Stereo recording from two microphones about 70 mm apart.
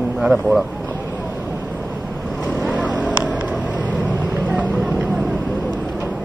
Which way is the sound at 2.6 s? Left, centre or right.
Right.